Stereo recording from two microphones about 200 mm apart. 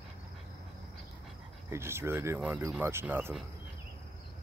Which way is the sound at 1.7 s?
10° right (ahead or behind).